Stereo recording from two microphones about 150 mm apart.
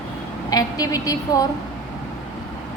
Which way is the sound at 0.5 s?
25° left (ahead or behind).